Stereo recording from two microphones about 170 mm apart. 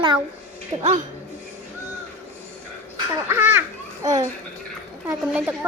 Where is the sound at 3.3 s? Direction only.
15° right (ahead or behind).